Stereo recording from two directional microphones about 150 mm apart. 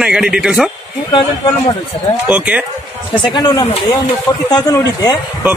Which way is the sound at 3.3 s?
25° left (ahead or behind).